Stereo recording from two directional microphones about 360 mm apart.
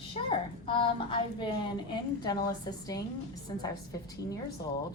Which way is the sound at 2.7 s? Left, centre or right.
Centre.